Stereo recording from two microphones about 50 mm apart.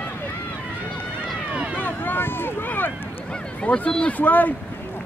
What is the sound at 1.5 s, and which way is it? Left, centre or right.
Run, right.